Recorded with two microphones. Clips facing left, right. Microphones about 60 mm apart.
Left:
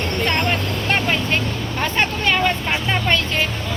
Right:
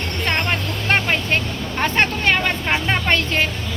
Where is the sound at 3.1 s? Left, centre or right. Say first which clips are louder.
Right 1 dB; right.